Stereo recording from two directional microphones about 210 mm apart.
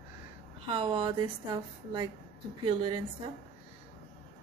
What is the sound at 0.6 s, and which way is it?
Speech, 25° right (ahead or behind).